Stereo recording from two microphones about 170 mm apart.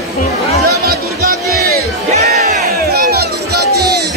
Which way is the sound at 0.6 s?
65° right (ahead or behind).